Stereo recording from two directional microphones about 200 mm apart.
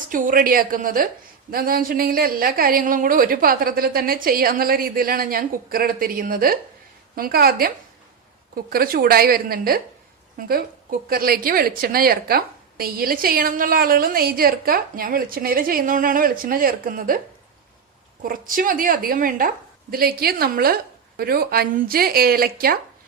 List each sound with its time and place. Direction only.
0.1 s a woman's voice: 45° right (ahead or behind)
18.2 s a woman's voice: 45° right (ahead or behind)